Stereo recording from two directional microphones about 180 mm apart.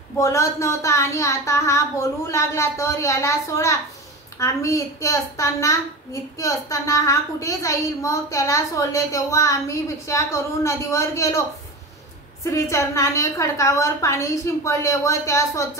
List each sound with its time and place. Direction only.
0.2 s a woman's voice: 15° left (ahead or behind)
12.4 s a woman's voice: 15° left (ahead or behind)